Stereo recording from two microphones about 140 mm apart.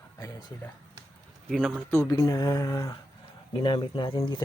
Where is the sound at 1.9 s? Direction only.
20° left (ahead or behind).